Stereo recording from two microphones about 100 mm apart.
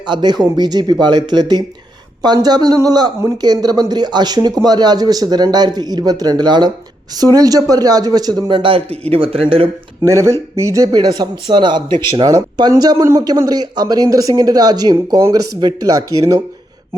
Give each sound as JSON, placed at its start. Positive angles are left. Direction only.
{"t": 0.0, "sound": "speech", "side_deg": -50}
{"t": 10.0, "sound": "speech", "side_deg": -30}
{"t": 13.0, "sound": "speech", "side_deg": -30}
{"t": 13.2, "sound": "speech", "side_deg": -40}